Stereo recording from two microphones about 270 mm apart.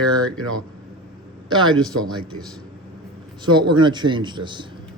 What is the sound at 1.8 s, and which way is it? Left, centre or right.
Speech, centre.